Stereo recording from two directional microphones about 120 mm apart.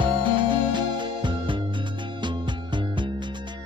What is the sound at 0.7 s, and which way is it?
Music, 40° right (ahead or behind).